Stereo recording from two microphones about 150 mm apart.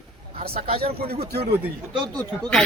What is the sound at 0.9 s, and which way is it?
Speech, 90° right.